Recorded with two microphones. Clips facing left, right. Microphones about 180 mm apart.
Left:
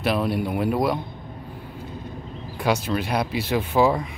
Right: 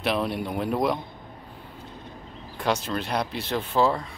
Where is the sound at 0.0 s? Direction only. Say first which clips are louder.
Left 3 dB; 5° left (ahead or behind).